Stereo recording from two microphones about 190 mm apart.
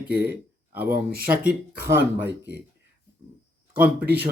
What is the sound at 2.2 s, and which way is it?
Speech, 60° right (ahead or behind).